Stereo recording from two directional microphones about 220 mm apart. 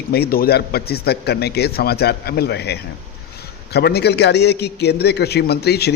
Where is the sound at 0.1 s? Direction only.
45° left (ahead or behind).